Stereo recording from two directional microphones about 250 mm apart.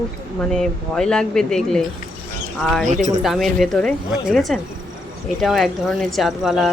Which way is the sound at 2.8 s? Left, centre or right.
Right.